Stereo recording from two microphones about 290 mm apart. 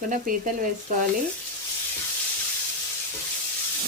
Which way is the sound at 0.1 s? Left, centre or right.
Right.